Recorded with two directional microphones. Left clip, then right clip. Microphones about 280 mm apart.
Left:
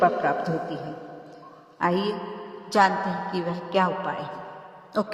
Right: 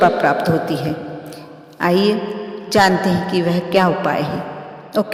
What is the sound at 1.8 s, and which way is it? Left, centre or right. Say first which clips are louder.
A man's voice: right 9 dB; right.